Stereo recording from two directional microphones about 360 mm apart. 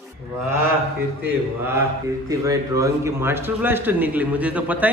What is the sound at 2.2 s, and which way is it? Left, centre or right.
A man's voice, centre.